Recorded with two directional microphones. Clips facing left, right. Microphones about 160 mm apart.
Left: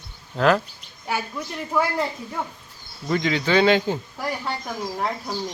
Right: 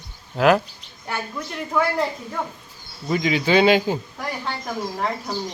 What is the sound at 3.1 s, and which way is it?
Speech, 10° right (ahead or behind).